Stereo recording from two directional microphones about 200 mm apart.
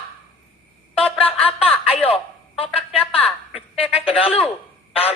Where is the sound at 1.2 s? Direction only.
30° left (ahead or behind).